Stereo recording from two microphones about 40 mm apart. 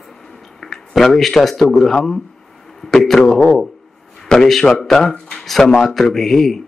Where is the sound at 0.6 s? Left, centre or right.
Centre.